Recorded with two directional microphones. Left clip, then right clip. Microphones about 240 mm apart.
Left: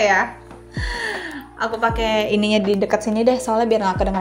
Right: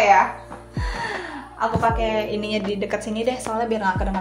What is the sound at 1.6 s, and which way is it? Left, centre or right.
A woman's voice, left.